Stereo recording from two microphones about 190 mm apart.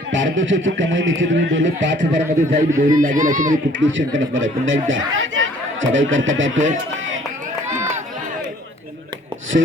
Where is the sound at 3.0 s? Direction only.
45° right (ahead or behind).